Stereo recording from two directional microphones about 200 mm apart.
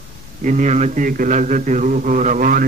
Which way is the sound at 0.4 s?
40° right (ahead or behind).